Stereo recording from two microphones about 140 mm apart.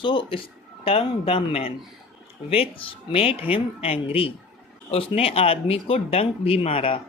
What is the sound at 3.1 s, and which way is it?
Speech, 45° left (ahead or behind).